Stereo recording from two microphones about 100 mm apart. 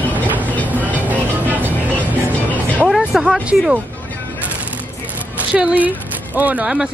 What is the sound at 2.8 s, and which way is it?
Speech, centre (ahead or behind).